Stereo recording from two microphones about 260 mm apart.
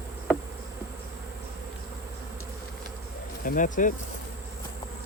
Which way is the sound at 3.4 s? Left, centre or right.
Left.